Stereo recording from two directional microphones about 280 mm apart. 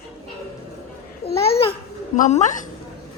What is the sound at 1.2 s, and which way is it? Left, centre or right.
Babbling, left.